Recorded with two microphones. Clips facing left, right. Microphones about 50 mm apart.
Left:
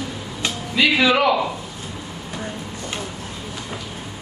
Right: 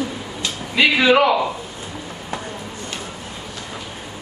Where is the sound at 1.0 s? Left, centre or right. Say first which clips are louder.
Right 5 dB; centre.